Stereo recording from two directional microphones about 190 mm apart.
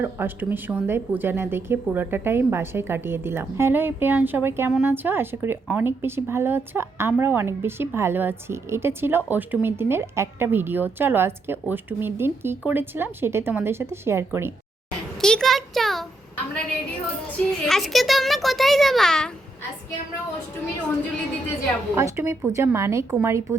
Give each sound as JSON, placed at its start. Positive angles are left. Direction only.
{"t": 0.0, "sound": "a woman's voice", "side_deg": -10}
{"t": 15.2, "sound": "a child's voice", "side_deg": 5}
{"t": 17.7, "sound": "a child's voice", "side_deg": 0}
{"t": 21.9, "sound": "a woman's voice", "side_deg": -15}